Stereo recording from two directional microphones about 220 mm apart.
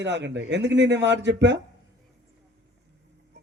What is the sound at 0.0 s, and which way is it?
A man's voice, 50° right (ahead or behind).